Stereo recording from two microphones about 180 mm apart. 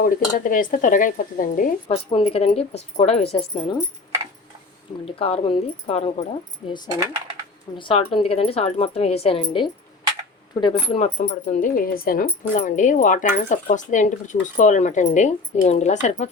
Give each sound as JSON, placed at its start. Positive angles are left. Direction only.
{"t": 0.0, "sound": "a woman's voice", "side_deg": 50}
{"t": 2.0, "sound": "speech", "side_deg": 30}
{"t": 5.0, "sound": "speech", "side_deg": 35}
{"t": 6.6, "sound": "speech", "side_deg": 0}
{"t": 7.8, "sound": "speech", "side_deg": 30}
{"t": 11.2, "sound": "a woman's voice", "side_deg": 45}